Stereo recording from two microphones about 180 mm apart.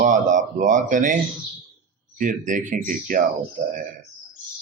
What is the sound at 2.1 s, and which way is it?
A man's voice, 45° right (ahead or behind).